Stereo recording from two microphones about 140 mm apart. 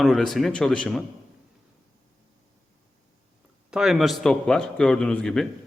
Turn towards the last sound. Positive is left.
turn(degrees=5)  # may be behind; listen again after turning